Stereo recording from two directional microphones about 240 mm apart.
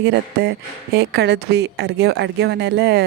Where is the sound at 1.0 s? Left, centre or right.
Right.